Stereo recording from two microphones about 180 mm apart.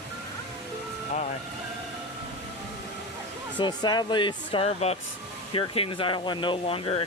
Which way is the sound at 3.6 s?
25° left (ahead or behind).